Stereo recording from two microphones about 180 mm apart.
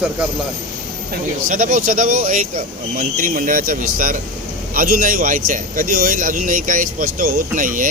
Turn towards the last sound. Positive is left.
turn(degrees=-45)  # may be behind; listen again after turning